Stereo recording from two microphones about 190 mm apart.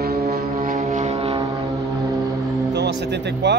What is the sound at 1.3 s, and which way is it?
Vehicle, 20° right (ahead or behind).